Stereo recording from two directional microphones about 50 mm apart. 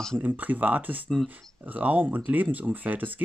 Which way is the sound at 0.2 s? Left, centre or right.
Right.